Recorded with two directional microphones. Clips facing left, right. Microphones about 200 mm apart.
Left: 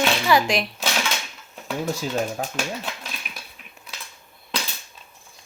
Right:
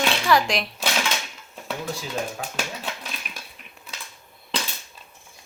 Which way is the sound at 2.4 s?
40° left (ahead or behind).